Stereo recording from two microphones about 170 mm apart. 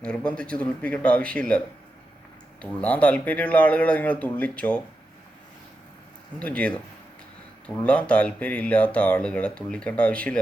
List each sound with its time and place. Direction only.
0.0 s speech: 5° left (ahead or behind)
6.4 s speech: 5° left (ahead or behind)
7.9 s speech: 5° left (ahead or behind)